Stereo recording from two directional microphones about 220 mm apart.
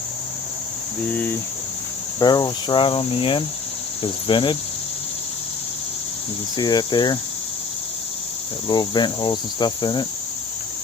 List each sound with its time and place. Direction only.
1.0 s cricket: 5° left (ahead or behind)
2.1 s cricket: 15° left (ahead or behind)
6.6 s cricket: 20° left (ahead or behind)
8.6 s cricket: 20° left (ahead or behind)